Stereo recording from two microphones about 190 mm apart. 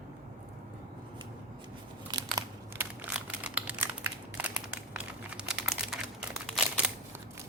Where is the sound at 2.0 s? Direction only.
20° right (ahead or behind).